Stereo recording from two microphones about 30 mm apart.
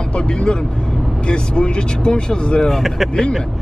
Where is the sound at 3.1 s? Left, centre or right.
Left.